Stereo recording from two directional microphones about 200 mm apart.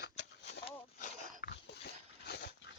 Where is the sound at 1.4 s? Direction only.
55° left (ahead or behind).